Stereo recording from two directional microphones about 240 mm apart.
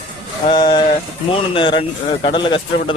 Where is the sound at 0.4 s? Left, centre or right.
Centre.